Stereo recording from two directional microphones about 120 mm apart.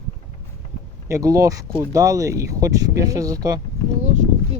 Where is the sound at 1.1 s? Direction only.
30° right (ahead or behind).